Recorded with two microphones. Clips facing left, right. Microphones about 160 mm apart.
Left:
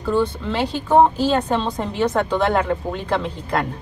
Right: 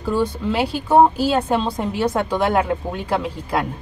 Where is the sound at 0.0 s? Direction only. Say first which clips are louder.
Even; 10° right (ahead or behind).